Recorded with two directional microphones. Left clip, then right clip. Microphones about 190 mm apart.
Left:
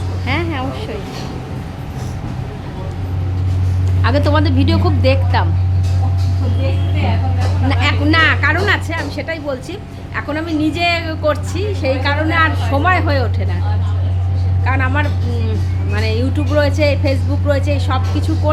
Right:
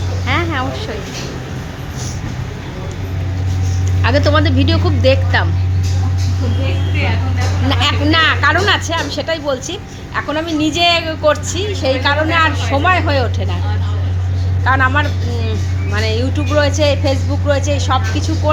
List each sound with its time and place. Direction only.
0.3 s a sound: 20° left (ahead or behind)
4.0 s speech: 10° left (ahead or behind)
7.7 s speech: 5° left (ahead or behind)
14.6 s speech: 5° left (ahead or behind)
15.4 s speech: 20° left (ahead or behind)